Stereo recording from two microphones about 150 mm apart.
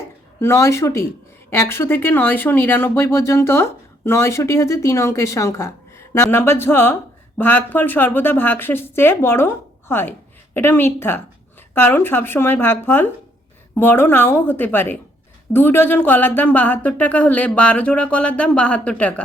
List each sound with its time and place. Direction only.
0.3 s a woman's voice: 20° left (ahead or behind)